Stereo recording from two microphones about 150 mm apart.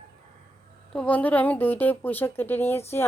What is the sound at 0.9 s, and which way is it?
A woman's voice, 5° left (ahead or behind).